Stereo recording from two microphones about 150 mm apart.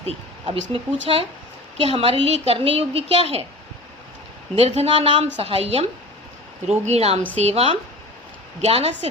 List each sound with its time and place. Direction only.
0.0 s a woman's voice: 35° right (ahead or behind)
4.5 s a woman's voice: 45° right (ahead or behind)
6.8 s speech: 45° right (ahead or behind)